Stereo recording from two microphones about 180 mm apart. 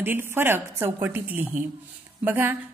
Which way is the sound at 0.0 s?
10° right (ahead or behind).